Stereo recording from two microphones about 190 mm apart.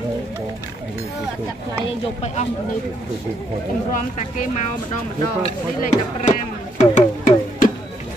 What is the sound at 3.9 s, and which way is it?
Speech, 45° left (ahead or behind).